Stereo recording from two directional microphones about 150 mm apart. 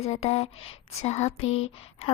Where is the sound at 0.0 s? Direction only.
45° left (ahead or behind).